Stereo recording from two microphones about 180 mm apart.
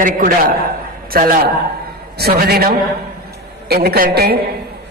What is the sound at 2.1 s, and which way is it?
A woman's voice, 60° right (ahead or behind).